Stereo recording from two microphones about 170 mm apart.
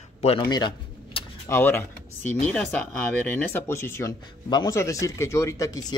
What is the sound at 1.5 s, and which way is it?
Speech, 10° left (ahead or behind).